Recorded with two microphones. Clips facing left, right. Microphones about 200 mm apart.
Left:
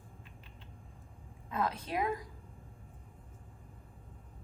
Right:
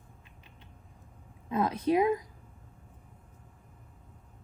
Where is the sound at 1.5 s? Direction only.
20° right (ahead or behind).